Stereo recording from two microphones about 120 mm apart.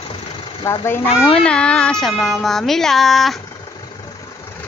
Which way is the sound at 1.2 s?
10° left (ahead or behind).